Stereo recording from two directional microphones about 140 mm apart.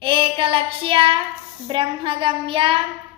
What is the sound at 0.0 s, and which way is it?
Child singing, 40° right (ahead or behind).